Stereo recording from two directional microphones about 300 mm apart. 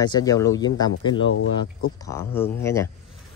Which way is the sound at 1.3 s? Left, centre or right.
Left.